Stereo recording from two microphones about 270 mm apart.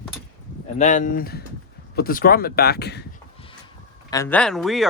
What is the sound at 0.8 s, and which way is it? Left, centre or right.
Speech, left.